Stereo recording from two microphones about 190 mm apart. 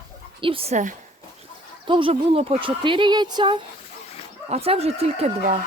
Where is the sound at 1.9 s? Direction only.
25° right (ahead or behind).